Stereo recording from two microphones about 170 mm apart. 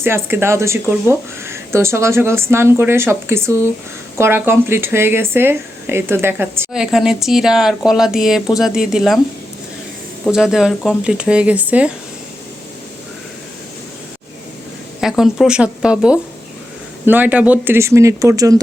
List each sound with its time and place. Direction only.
0.0 s speech: 15° right (ahead or behind)
6.7 s a woman's voice: 5° right (ahead or behind)
10.2 s a woman's voice: 5° right (ahead or behind)
15.0 s a woman's voice: centre (ahead or behind); by 18.6 s 20° right (ahead or behind)